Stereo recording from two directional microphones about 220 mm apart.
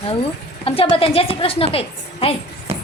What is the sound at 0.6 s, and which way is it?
Speech, 25° left (ahead or behind).